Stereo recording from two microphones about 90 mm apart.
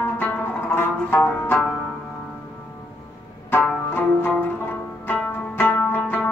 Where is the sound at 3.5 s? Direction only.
20° left (ahead or behind).